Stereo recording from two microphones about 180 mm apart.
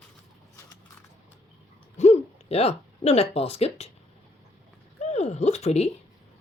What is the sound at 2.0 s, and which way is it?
Speech, 35° left (ahead or behind).